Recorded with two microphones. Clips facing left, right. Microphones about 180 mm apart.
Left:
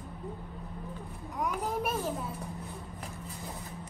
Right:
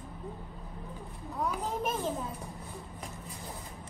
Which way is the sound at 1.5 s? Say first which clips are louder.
Left 1 dB; 10° left (ahead or behind).